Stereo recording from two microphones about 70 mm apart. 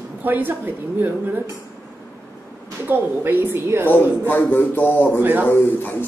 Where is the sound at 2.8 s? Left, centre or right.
Right.